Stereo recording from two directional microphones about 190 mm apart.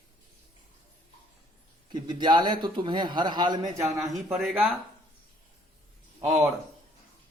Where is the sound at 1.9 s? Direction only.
20° right (ahead or behind).